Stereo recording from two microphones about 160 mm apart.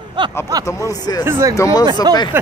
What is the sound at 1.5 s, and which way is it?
Speech, 20° left (ahead or behind).